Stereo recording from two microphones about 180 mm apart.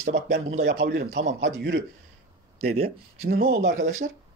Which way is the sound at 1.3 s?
80° right.